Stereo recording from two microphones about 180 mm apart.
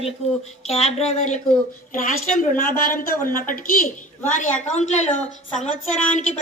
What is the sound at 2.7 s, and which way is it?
A woman's voice, 50° left (ahead or behind).